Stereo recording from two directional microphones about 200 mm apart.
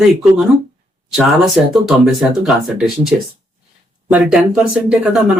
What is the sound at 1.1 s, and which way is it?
Speech, centre (ahead or behind).